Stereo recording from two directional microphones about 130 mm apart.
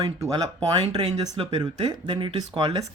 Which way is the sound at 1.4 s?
40° right (ahead or behind).